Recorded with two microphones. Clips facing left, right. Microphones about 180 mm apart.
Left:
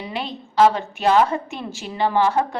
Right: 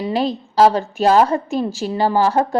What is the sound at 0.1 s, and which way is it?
A woman's voice, 40° right (ahead or behind).